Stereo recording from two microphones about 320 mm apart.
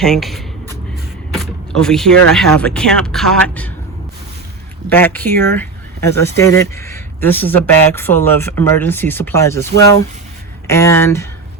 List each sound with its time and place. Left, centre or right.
0.0 s a sound: centre
1.3 s speech: centre
4.9 s speech: centre
10.7 s speech: centre